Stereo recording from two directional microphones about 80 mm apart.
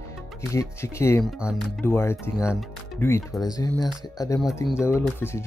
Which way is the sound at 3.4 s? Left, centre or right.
Left.